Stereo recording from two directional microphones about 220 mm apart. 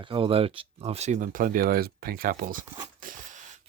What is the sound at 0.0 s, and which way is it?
Speech, 25° right (ahead or behind).